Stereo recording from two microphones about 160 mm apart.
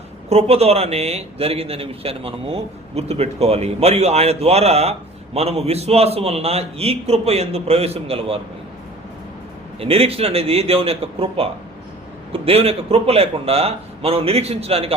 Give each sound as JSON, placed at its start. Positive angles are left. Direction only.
{"t": 0.3, "sound": "speech", "side_deg": -40}
{"t": 9.8, "sound": "speech", "side_deg": -40}